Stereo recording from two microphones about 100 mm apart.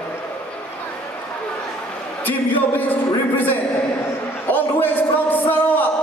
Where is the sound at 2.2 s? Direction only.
15° left (ahead or behind).